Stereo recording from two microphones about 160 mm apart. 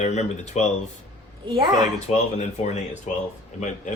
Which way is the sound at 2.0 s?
45° left (ahead or behind).